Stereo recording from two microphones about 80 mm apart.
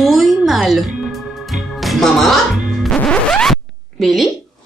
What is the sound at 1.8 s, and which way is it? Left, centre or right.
Speech, centre.